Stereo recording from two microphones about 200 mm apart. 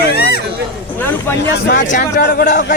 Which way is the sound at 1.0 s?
10° left (ahead or behind).